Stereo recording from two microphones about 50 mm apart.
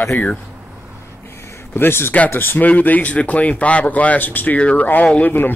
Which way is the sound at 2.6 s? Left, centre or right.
Left.